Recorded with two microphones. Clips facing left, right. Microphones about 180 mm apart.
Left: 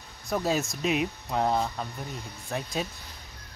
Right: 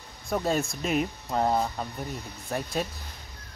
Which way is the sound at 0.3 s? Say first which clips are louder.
Right 1 dB; centre (ahead or behind).